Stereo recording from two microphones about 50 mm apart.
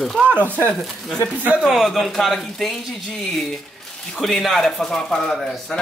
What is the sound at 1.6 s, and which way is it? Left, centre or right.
Speech, centre.